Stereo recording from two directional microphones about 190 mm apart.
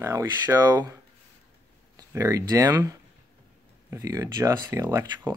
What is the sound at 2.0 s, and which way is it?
Speech, 15° right (ahead or behind).